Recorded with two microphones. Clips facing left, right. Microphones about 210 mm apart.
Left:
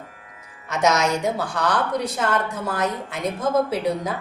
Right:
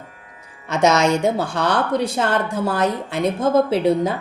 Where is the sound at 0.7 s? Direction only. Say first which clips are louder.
Right 4 dB; 30° right (ahead or behind).